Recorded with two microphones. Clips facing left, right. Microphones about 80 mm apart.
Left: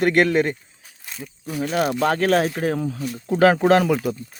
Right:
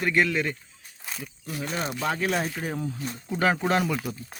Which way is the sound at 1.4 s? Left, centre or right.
Left.